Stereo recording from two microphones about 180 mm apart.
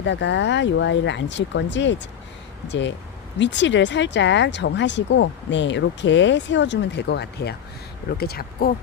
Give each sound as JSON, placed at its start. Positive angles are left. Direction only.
{"t": 0.0, "sound": "speech", "side_deg": 90}